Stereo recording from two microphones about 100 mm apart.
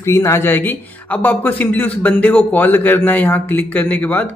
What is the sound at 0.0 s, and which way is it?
Speech, 30° left (ahead or behind).